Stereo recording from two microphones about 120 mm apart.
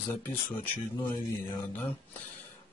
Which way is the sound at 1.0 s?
30° left (ahead or behind).